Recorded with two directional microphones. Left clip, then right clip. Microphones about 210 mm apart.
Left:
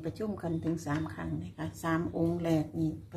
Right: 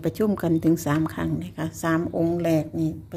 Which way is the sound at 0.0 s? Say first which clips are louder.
Right 12 dB; 50° right (ahead or behind).